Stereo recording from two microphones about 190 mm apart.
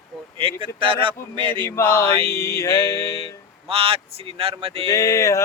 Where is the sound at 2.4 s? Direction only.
15° left (ahead or behind).